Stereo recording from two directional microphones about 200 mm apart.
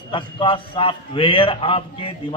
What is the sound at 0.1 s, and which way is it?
A man's voice, 25° left (ahead or behind).